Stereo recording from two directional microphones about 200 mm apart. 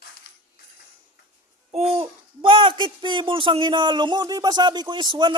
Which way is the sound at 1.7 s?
30° right (ahead or behind).